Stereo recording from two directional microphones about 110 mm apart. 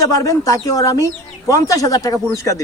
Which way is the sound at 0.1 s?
30° left (ahead or behind).